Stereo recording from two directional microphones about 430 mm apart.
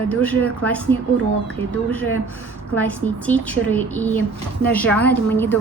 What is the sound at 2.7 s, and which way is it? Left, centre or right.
Speech, centre.